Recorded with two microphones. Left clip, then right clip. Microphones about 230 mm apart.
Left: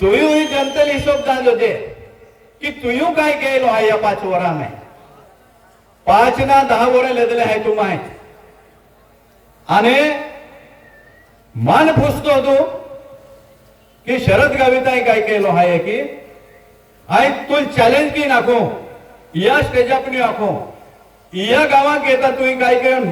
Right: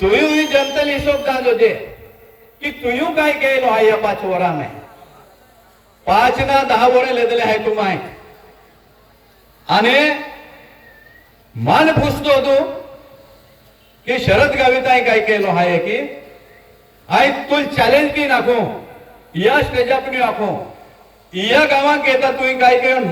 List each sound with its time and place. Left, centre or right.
0.0 s a man's voice: left
6.1 s a man's voice: left
9.6 s a man's voice: left
11.6 s a man's voice: left
14.0 s a man's voice: left
17.1 s a man's voice: left